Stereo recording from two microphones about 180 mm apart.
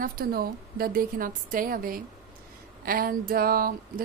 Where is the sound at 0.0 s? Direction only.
55° right (ahead or behind).